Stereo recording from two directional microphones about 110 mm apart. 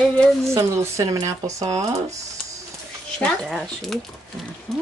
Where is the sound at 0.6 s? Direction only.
30° right (ahead or behind).